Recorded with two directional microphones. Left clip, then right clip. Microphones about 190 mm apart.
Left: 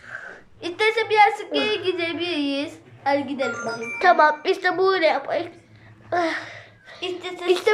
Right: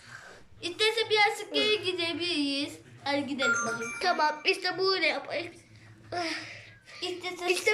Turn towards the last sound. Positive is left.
turn(degrees=0)  # may be behind; listen again after turning